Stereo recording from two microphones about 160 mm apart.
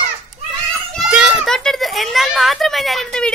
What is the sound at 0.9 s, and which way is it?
Children playing, 5° right (ahead or behind).